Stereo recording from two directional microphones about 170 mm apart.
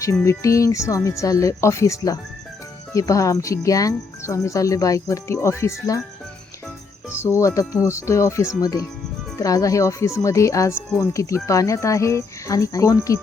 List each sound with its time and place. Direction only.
0.0 s speech: 15° left (ahead or behind)
7.2 s speech: 15° left (ahead or behind)